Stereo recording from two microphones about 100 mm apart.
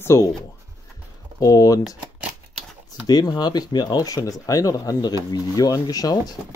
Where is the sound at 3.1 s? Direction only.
45° left (ahead or behind).